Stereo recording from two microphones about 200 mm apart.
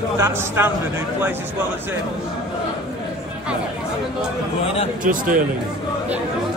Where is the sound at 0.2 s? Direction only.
10° right (ahead or behind).